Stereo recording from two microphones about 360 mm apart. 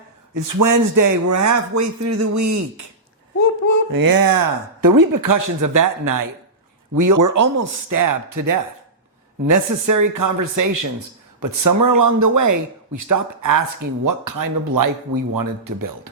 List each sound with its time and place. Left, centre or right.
0.4 s a man's voice: right
3.9 s a man's voice: right